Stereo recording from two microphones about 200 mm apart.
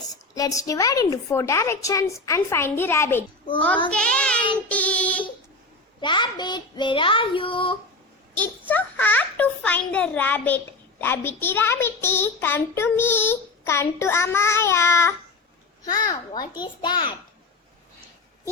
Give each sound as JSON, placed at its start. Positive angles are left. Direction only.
{"t": 0.1, "sound": "a child's voice", "side_deg": 15}
{"t": 3.8, "sound": "child singing", "side_deg": 5}
{"t": 6.0, "sound": "child singing", "side_deg": 25}
{"t": 8.4, "sound": "a child's voice", "side_deg": 10}
{"t": 15.8, "sound": "child singing", "side_deg": 20}